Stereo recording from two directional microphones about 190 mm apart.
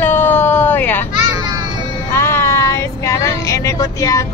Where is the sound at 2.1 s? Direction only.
15° left (ahead or behind).